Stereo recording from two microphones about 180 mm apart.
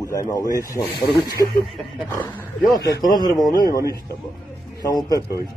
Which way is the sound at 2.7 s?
65° left (ahead or behind).